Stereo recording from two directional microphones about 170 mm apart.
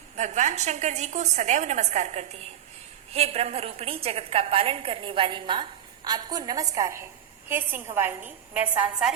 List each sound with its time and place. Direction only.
0.2 s a woman's voice: 45° right (ahead or behind); by 9.1 s 5° right (ahead or behind)